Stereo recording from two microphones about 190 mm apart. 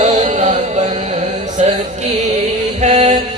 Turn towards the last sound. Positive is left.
turn(degrees=-35)  # may be behind; listen again after turning